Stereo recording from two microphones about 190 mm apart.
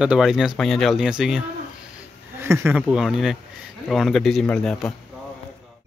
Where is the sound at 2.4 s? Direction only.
15° right (ahead or behind).